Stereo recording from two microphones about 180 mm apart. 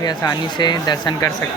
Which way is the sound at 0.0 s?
20° left (ahead or behind).